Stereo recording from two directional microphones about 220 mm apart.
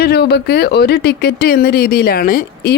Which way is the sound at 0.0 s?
50° left (ahead or behind).